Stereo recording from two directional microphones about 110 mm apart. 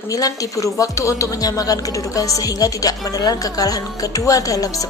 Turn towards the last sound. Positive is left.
turn(degrees=30)  # may be behind; listen again after turning